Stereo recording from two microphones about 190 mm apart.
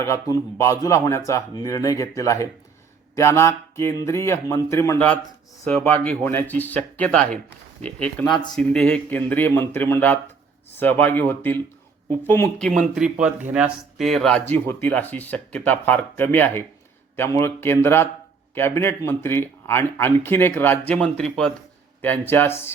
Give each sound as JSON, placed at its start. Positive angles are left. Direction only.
{"t": 0.0, "sound": "speech", "side_deg": 15}